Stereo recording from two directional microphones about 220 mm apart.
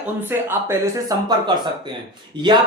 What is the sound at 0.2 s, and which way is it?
Speech, 10° right (ahead or behind).